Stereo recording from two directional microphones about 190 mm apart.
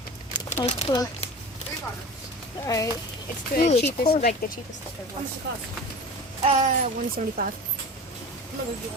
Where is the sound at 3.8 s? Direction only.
55° left (ahead or behind).